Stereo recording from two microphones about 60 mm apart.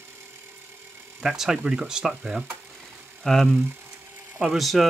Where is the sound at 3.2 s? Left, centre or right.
Centre.